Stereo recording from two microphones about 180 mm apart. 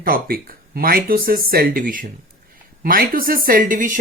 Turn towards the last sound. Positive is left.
turn(degrees=-45)  # may be behind; listen again after turning